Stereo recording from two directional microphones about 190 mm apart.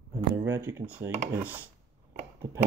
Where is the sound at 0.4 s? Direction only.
15° right (ahead or behind).